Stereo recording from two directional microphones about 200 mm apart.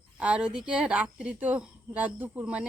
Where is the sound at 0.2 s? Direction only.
5° right (ahead or behind).